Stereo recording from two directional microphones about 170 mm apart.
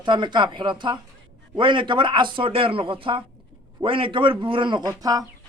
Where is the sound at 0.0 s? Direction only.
25° right (ahead or behind).